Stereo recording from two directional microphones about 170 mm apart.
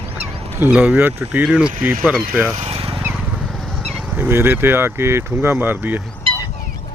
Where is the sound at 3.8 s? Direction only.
5° right (ahead or behind).